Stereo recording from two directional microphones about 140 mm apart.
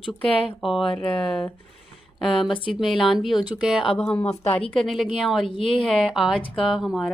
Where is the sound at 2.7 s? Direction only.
Centre (ahead or behind).